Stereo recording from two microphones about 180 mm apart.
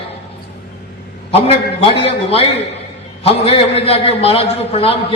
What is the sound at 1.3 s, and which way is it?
A man's voice, 30° left (ahead or behind).